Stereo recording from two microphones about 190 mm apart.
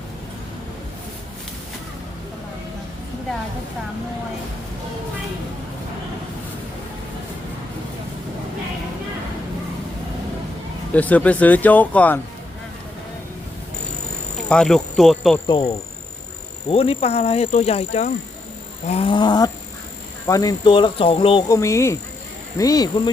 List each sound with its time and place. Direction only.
10.9 s speech: 10° left (ahead or behind)
14.5 s speech: 5° left (ahead or behind)
15.4 s speech: 25° left (ahead or behind)